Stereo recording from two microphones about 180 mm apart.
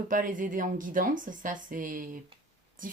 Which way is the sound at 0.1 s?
50° right (ahead or behind).